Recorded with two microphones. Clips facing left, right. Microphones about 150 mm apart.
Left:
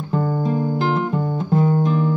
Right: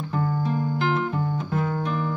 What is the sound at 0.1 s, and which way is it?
Music, 35° left (ahead or behind).